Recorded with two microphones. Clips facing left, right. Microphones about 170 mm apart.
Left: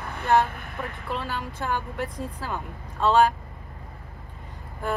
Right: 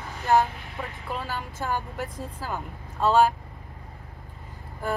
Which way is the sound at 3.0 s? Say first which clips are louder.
Even; centre (ahead or behind).